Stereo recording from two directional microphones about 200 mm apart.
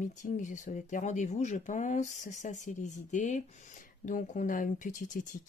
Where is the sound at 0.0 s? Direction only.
40° left (ahead or behind).